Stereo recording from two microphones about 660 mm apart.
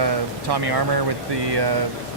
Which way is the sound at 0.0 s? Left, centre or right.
Right.